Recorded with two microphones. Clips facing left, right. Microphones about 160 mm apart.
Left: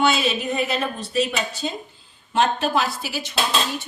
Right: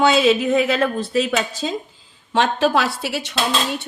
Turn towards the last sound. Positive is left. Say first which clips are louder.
# right 2 dB
turn(degrees=-65)  # may be behind; listen again after turning